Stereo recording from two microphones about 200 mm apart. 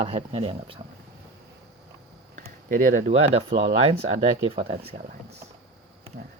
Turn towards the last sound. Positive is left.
turn(degrees=-25)  # may be behind; listen again after turning